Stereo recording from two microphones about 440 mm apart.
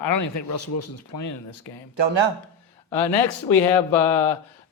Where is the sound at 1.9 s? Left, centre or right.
Right.